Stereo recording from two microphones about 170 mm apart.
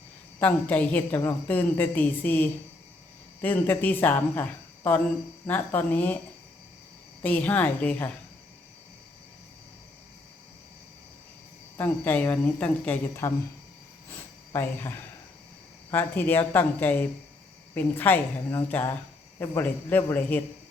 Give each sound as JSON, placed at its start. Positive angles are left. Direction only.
{"t": 0.3, "sound": "a woman's voice", "side_deg": 10}
{"t": 7.2, "sound": "a woman's voice", "side_deg": 10}
{"t": 11.8, "sound": "a woman's voice", "side_deg": 10}
{"t": 14.1, "sound": "a sound", "side_deg": 10}
{"t": 15.9, "sound": "a woman's voice", "side_deg": 10}